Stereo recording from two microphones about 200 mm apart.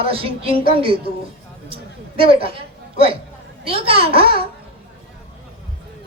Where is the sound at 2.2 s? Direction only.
25° right (ahead or behind).